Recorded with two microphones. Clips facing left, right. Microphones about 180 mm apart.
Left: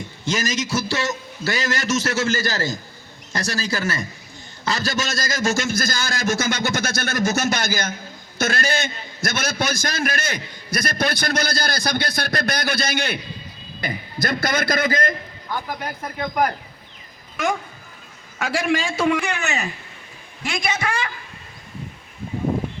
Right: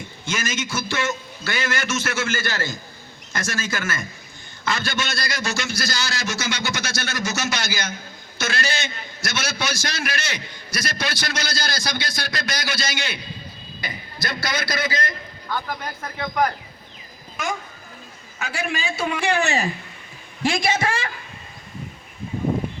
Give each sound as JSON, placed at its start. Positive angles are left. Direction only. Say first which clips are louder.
{"t": 0.3, "sound": "a man's voice", "louder": "left 4 dB", "side_deg": 35}
{"t": 15.4, "sound": "speech", "louder": "even", "side_deg": 10}
{"t": 18.8, "sound": "a man's voice", "louder": "left 4 dB", "side_deg": 90}
{"t": 19.2, "sound": "a woman's voice", "louder": "right 4 dB", "side_deg": -30}